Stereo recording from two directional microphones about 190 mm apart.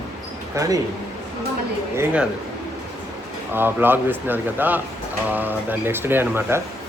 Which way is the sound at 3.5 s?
10° right (ahead or behind).